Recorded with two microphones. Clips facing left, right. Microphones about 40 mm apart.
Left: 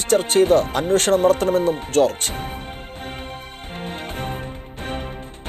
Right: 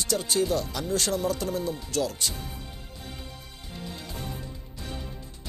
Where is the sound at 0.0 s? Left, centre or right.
Left.